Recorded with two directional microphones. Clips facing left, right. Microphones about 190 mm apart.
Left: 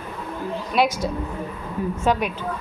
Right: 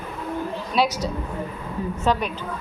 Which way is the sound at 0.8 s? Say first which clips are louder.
Left 2 dB; 50° left (ahead or behind).